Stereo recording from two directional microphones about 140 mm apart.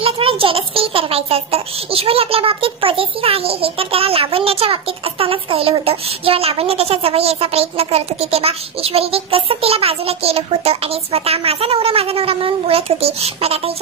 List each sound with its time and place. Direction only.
0.0 s a child's voice: 40° right (ahead or behind)